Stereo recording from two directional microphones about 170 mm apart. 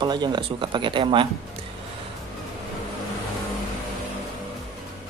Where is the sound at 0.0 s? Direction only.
25° right (ahead or behind).